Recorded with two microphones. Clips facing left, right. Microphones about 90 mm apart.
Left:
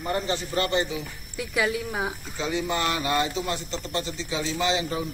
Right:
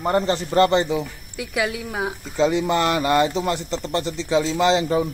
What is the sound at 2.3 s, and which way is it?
Speech, 80° right.